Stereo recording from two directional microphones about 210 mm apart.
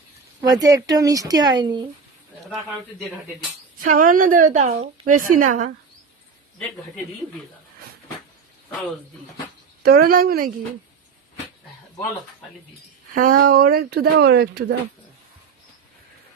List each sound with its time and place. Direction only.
0.4 s speech: 15° right (ahead or behind)
3.8 s a woman's voice: 40° right (ahead or behind)
9.8 s speech: 45° right (ahead or behind)
13.1 s speech: 40° right (ahead or behind)